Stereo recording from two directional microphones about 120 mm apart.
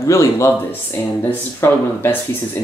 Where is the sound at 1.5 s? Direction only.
20° left (ahead or behind).